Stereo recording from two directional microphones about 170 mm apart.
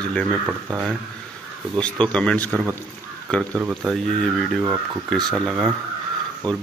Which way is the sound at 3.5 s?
15° right (ahead or behind).